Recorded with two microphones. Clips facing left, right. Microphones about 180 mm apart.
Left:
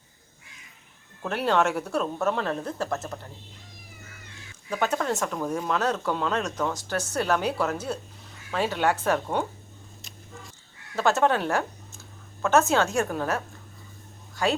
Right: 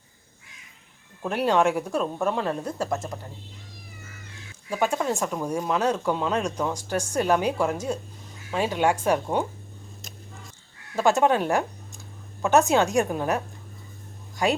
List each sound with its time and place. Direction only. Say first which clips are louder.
1.2 s speech: right 2 dB; 10° right (ahead or behind)
4.7 s speech: right 1 dB; 10° right (ahead or behind)
10.9 s speech: right 2 dB; 10° right (ahead or behind)
14.4 s speech: right 2 dB; 15° right (ahead or behind)